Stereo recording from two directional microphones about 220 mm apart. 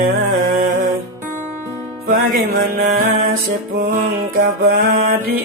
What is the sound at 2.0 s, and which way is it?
Music, 40° right (ahead or behind).